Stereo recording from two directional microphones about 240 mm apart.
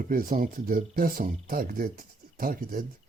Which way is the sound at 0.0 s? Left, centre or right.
Right.